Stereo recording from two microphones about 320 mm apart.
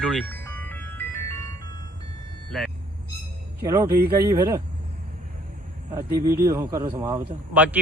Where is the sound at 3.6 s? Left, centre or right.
Centre.